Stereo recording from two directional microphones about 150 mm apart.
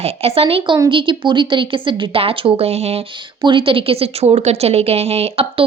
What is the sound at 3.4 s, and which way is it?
A woman's voice, 35° right (ahead or behind).